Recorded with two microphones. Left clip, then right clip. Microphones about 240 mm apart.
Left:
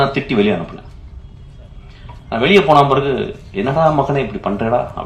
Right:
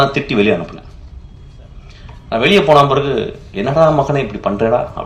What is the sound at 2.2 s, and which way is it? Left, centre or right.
A man's voice, right.